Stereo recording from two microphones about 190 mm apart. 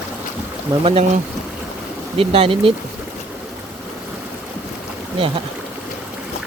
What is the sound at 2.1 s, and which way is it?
Speech, 30° right (ahead or behind).